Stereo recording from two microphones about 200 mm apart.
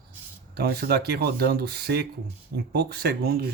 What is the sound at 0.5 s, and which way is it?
Speech, 50° right (ahead or behind).